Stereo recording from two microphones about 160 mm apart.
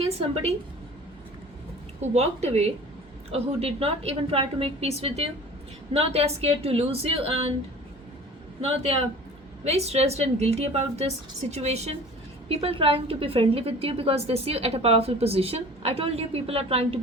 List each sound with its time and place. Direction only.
2.0 s a woman's voice: 40° right (ahead or behind)
8.6 s a woman's voice: 40° right (ahead or behind)